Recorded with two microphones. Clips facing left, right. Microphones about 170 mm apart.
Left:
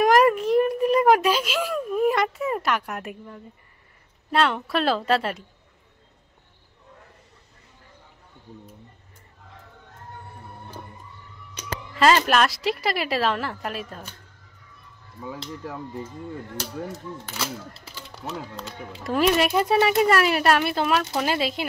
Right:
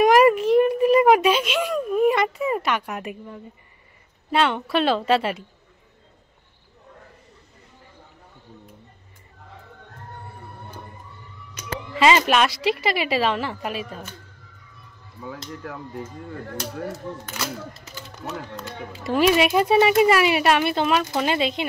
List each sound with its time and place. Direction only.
0.0 s a sound: 5° right (ahead or behind)
4.3 s speech: centre (ahead or behind)
12.0 s speech: centre (ahead or behind)
15.2 s speech: 30° left (ahead or behind)
17.7 s speech: 30° left (ahead or behind)
18.9 s speech: centre (ahead or behind)